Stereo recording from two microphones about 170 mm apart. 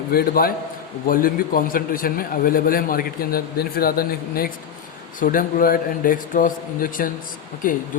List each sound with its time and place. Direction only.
0.1 s a man's voice: 60° left (ahead or behind)